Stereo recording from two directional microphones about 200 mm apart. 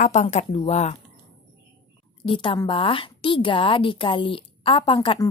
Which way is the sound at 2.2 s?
25° left (ahead or behind).